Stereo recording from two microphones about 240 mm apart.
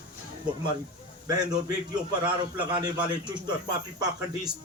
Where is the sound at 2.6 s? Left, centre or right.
Centre.